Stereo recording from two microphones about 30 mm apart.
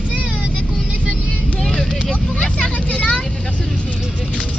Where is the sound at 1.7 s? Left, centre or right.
Centre.